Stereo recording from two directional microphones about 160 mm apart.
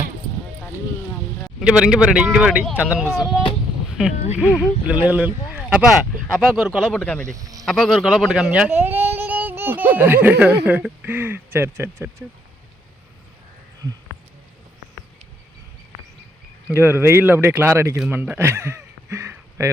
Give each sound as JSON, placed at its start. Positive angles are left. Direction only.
{"t": 1.6, "sound": "speech", "side_deg": -5}
{"t": 4.9, "sound": "speech", "side_deg": -10}
{"t": 6.2, "sound": "speech", "side_deg": 5}
{"t": 7.3, "sound": "speech", "side_deg": -20}
{"t": 7.6, "sound": "speech", "side_deg": 0}
{"t": 16.6, "sound": "speech", "side_deg": -15}